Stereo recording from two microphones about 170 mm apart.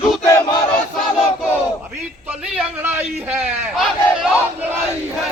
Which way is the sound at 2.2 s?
5° right (ahead or behind).